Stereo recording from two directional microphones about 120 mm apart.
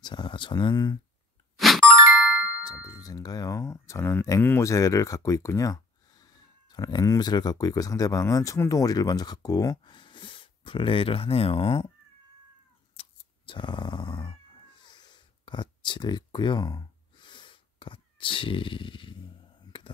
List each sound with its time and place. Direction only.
0.0 s speech: 40° left (ahead or behind)
1.6 s music: centre (ahead or behind)
2.6 s speech: 30° left (ahead or behind); by 11.9 s 50° left (ahead or behind)
12.9 s cat: 50° left (ahead or behind)
14.8 s a sound: 40° left (ahead or behind)